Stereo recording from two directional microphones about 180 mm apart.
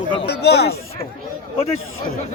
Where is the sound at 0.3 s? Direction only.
65° left (ahead or behind).